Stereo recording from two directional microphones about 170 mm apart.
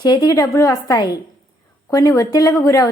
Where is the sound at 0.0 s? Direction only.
25° left (ahead or behind).